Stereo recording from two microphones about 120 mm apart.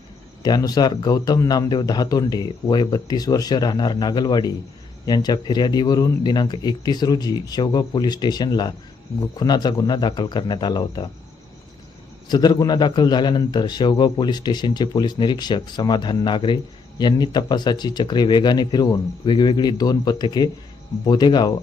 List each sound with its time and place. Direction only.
0.4 s a man's voice: 35° left (ahead or behind)
12.3 s a man's voice: 35° left (ahead or behind)